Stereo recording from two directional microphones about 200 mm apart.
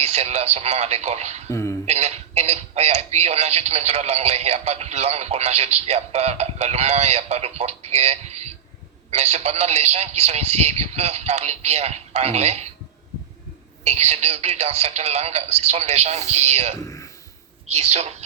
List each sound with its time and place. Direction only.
0.0 s speech: 35° right (ahead or behind)
1.5 s speech: 15° left (ahead or behind)
1.9 s speech: 30° right (ahead or behind)
13.8 s speech: 35° right (ahead or behind)
16.8 s a sound: 15° left (ahead or behind)
17.7 s speech: 35° right (ahead or behind)